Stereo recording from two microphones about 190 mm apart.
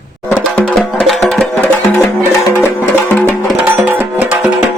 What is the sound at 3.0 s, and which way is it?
Music, 10° left (ahead or behind).